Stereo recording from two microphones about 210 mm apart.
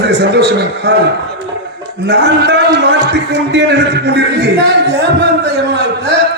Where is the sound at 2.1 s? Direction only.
50° right (ahead or behind).